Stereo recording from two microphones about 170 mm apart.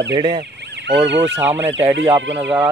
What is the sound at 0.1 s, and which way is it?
Speech, 25° right (ahead or behind).